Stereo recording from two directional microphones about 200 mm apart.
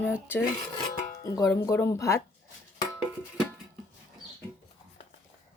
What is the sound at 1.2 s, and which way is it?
Speech, 15° left (ahead or behind).